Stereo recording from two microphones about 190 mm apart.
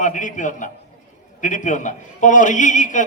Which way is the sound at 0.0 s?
40° left (ahead or behind).